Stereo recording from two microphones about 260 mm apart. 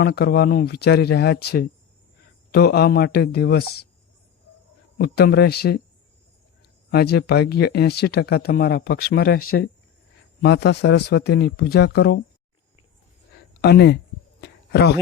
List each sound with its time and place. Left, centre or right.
0.0 s speech: left
4.9 s speech: left
6.9 s speech: left
10.4 s speech: left
13.6 s speech: left
14.4 s a sound: left